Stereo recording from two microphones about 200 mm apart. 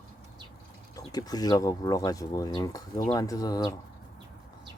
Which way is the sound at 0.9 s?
20° left (ahead or behind).